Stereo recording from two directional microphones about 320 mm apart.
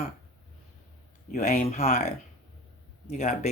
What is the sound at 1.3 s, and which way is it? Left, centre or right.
Speech, left.